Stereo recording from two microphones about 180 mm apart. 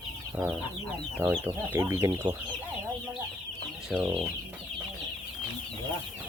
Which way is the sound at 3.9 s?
Centre (ahead or behind).